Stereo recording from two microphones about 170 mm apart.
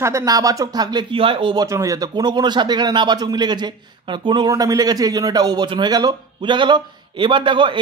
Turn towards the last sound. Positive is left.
turn(degrees=-30)  # may be behind; listen again after turning